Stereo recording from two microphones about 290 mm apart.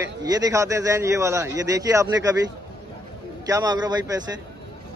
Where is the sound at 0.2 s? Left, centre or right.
Centre.